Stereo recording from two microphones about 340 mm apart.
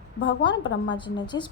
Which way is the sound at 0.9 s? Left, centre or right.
Centre.